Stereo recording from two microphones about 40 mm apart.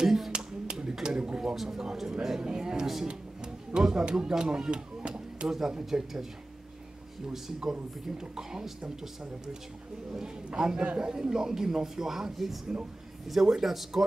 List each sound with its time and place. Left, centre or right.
0.0 s clapping: centre
1.0 s a sound: right
1.5 s speech: centre
2.4 s a sound: centre
3.7 s speech: centre
5.5 s speech: centre
7.3 s speech: centre
10.1 s speech: centre